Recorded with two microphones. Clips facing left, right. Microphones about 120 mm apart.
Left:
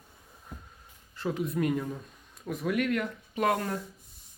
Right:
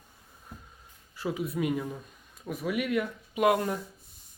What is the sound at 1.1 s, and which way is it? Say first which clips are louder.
Speech: left 1 dB; 5° right (ahead or behind).